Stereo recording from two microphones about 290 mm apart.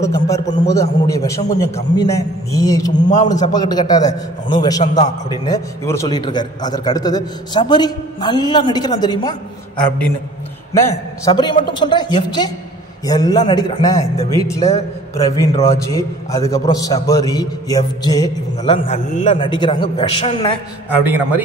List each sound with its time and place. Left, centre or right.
0.0 s a man's voice: centre
3.1 s a man's voice: left
3.5 s a man's voice: centre
4.1 s a man's voice: left
4.6 s a man's voice: centre
9.8 s a man's voice: centre